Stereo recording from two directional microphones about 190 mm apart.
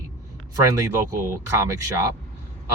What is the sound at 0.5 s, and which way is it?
Speech, 20° right (ahead or behind).